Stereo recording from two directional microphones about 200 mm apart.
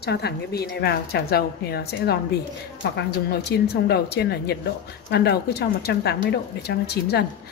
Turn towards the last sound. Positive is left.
turn(degrees=55)  # may be behind; listen again after turning